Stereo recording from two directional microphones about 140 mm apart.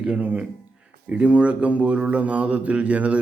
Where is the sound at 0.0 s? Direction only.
10° right (ahead or behind).